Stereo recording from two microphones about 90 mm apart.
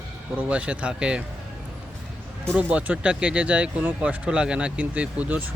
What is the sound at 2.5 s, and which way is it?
Speech, 15° right (ahead or behind).